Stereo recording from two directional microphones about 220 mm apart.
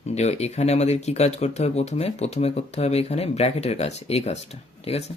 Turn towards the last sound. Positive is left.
turn(degrees=30)  # may be behind; listen again after turning